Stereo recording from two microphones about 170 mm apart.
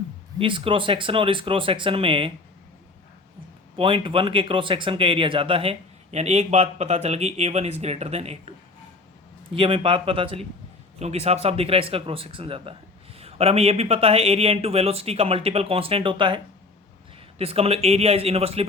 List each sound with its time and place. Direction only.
0.3 s speech: 30° right (ahead or behind)
3.8 s speech: 30° right (ahead or behind)